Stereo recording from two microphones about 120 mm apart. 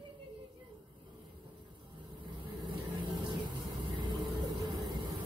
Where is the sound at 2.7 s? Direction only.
45° right (ahead or behind).